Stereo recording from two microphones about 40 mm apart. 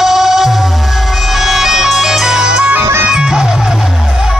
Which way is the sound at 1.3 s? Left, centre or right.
Centre.